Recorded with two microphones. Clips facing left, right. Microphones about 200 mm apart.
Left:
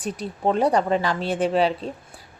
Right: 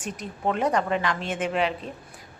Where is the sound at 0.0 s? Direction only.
35° left (ahead or behind).